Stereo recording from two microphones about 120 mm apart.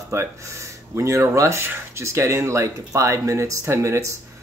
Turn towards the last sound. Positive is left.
turn(degrees=-25)  # may be behind; listen again after turning